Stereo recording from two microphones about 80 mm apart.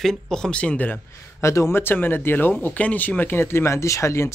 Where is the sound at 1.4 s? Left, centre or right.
Left.